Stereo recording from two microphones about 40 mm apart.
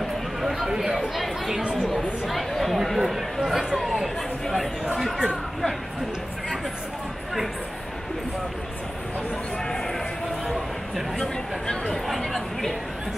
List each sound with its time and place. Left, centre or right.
0.4 s a sound: centre
0.7 s speech: centre
0.9 s speech: centre
5.3 s speech: centre
11.1 s speech: centre